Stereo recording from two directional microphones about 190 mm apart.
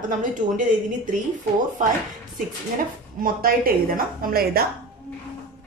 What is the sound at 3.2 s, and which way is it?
A woman's voice, 50° right (ahead or behind).